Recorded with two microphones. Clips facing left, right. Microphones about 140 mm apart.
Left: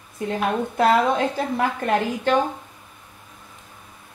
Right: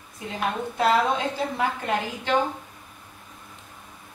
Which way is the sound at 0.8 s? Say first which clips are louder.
Left 3 dB; 50° left (ahead or behind).